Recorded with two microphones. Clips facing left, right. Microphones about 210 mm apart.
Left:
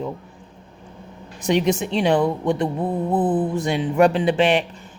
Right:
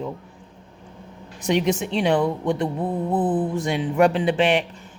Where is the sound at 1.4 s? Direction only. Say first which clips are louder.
Left 2 dB; 35° left (ahead or behind).